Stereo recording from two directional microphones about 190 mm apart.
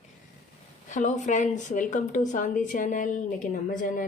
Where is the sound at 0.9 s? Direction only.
40° left (ahead or behind).